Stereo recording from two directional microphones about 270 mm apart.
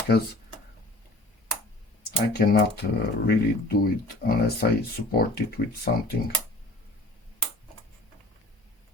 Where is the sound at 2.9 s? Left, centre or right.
Left.